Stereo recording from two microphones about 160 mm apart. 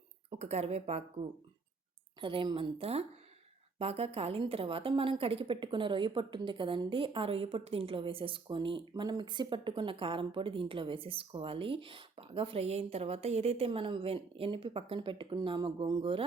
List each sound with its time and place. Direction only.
0.3 s speech: 45° right (ahead or behind)
2.2 s a woman's voice: 30° right (ahead or behind)